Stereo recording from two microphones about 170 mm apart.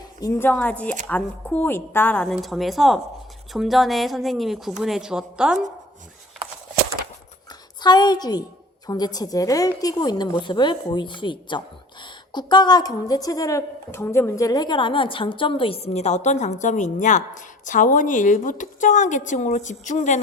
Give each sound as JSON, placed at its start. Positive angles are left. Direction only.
{"t": 0.2, "sound": "speech", "side_deg": 15}
{"t": 7.8, "sound": "a woman's voice", "side_deg": 25}